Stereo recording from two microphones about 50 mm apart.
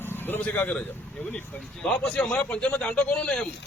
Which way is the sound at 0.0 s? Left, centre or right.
Left.